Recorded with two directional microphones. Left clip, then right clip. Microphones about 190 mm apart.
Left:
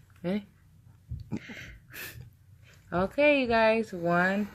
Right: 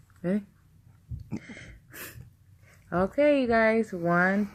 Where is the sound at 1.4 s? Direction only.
50° right (ahead or behind).